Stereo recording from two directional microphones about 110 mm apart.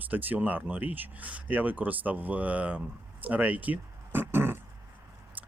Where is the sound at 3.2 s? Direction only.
15° right (ahead or behind).